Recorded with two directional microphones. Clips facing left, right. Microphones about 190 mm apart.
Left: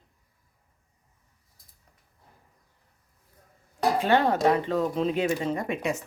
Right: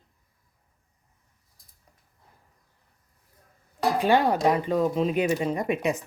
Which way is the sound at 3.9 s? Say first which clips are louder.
Right 2 dB; 15° right (ahead or behind).